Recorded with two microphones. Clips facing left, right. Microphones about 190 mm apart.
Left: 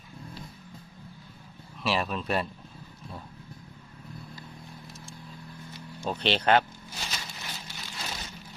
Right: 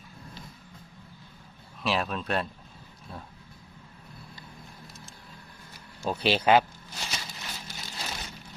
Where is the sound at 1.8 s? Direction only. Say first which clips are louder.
Even; centre (ahead or behind).